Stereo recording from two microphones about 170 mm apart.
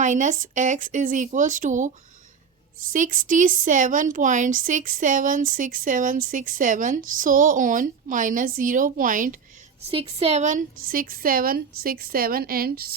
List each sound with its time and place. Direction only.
0.0 s speech: 45° right (ahead or behind)
2.9 s speech: 50° right (ahead or behind)
9.9 s a woman's voice: 35° right (ahead or behind); by 12.9 s 65° right (ahead or behind)